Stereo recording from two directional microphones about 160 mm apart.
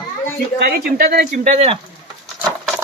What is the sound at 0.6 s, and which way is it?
Speech, 70° right (ahead or behind).